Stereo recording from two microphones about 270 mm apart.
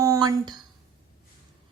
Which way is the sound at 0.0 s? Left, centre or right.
Centre.